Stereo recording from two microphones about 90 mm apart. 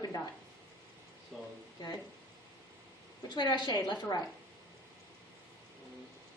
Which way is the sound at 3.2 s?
50° left (ahead or behind).